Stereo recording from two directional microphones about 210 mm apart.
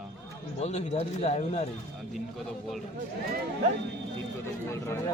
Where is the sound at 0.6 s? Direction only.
30° left (ahead or behind).